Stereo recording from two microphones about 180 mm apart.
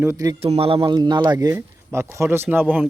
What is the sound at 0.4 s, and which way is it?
Speech, 35° right (ahead or behind).